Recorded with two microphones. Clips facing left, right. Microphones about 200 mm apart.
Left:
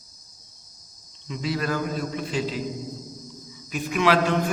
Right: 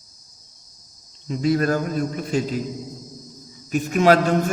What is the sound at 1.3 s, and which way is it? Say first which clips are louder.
A man's voice: right 7 dB; 50° right (ahead or behind).